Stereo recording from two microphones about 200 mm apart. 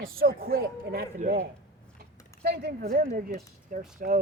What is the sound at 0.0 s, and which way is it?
Speech, 45° right (ahead or behind).